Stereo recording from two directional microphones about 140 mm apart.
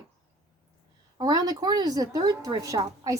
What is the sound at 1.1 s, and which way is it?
Speech, 30° right (ahead or behind).